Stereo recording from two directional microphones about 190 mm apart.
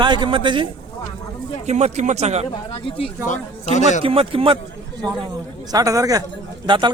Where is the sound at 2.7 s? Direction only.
30° left (ahead or behind).